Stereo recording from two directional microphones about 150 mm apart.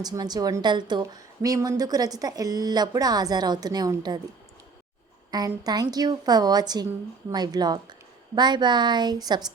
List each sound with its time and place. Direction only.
0.0 s a woman's voice: 25° right (ahead or behind)
5.3 s a woman's voice: 25° right (ahead or behind)